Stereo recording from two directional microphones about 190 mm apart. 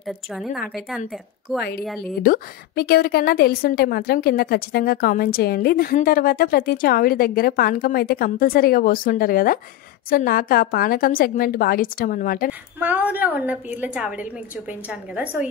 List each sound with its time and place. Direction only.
0.0 s a woman's voice: centre (ahead or behind)
2.2 s a woman's voice: 50° left (ahead or behind)
12.7 s a woman's voice: 10° right (ahead or behind)